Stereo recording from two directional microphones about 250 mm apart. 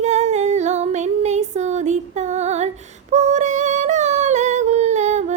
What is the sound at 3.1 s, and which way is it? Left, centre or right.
Humming, right.